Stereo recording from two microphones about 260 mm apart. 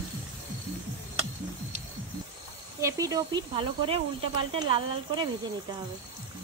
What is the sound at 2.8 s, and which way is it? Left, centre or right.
Speech, centre.